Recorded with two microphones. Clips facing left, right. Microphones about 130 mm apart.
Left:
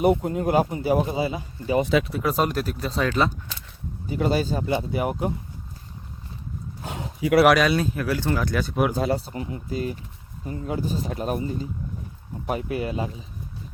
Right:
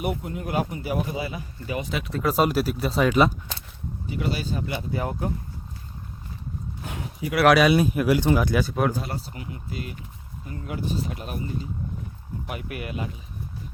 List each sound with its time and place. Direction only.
0.0 s speech: 30° left (ahead or behind)
2.2 s speech: 5° right (ahead or behind)
4.1 s speech: 40° left (ahead or behind); by 5.3 s 15° left (ahead or behind)
6.8 s a sound: 30° left (ahead or behind)
7.4 s speech: 5° right (ahead or behind)
9.3 s speech: 30° left (ahead or behind)